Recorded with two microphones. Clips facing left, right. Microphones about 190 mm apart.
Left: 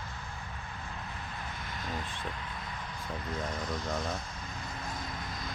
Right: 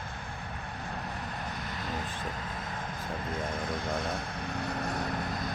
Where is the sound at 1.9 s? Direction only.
45° right (ahead or behind).